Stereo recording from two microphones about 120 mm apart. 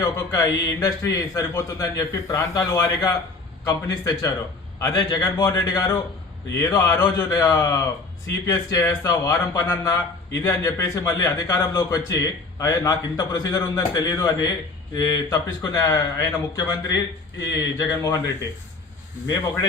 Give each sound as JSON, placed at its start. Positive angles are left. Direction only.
{"t": 0.0, "sound": "a man's voice", "side_deg": 25}
{"t": 19.3, "sound": "a man's voice", "side_deg": 20}